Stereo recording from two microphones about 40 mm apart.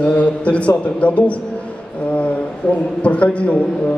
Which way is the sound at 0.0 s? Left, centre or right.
Left.